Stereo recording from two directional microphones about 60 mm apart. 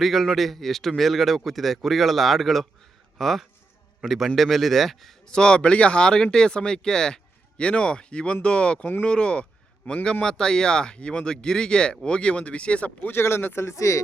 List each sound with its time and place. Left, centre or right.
0.0 s a man's voice: centre; by 13.1 s left
13.1 s speech: left
13.7 s speech: left